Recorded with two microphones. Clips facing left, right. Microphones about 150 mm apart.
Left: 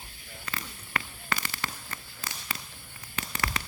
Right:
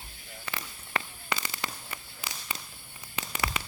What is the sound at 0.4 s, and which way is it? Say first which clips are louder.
Fireworks: even; 15° right (ahead or behind).